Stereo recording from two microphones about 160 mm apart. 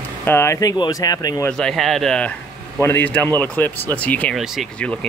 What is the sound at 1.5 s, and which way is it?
Speech, 5° left (ahead or behind).